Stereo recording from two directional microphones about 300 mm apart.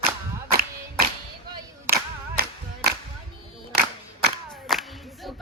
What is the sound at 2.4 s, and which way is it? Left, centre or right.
Music, right.